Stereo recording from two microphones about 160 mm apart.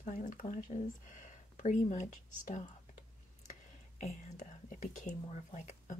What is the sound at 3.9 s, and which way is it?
Speech, 50° left (ahead or behind).